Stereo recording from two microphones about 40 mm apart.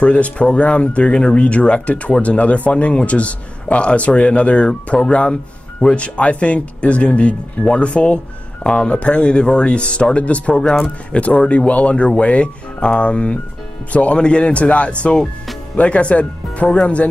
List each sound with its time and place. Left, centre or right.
0.0 s speech: left
10.6 s speech: centre
11.1 s speech: left